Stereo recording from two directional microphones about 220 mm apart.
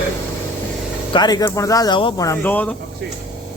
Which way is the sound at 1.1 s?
20° left (ahead or behind).